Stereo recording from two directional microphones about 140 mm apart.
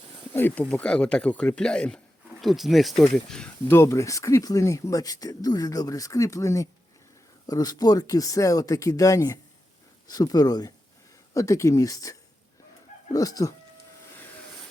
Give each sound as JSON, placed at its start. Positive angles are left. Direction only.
{"t": 0.3, "sound": "speech", "side_deg": 15}
{"t": 3.7, "sound": "speech", "side_deg": 20}